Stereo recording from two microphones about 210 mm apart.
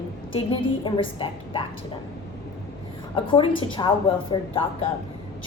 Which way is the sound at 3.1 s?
25° left (ahead or behind).